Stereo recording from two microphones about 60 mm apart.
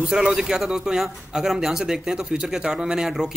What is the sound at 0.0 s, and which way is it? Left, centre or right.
A man's voice, centre.